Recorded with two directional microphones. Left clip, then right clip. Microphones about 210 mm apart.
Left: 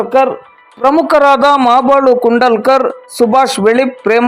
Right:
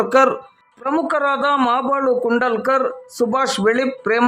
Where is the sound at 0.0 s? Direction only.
Centre (ahead or behind).